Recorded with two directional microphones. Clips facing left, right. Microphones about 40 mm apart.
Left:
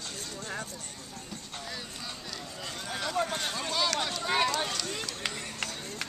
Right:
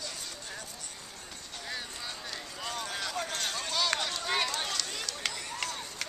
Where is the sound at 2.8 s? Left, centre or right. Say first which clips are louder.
Left 6 dB; centre.